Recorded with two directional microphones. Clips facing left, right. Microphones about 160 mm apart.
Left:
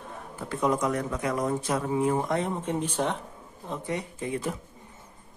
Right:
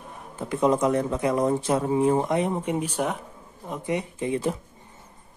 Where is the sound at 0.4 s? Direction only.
25° right (ahead or behind).